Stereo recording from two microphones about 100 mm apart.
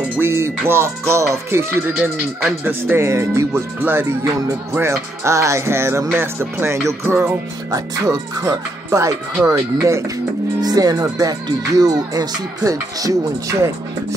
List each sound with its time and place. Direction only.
0.2 s speech: 25° right (ahead or behind)
10.6 s speech: 40° right (ahead or behind)